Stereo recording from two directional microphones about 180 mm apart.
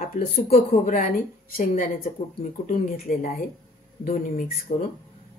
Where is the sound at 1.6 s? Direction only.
40° left (ahead or behind).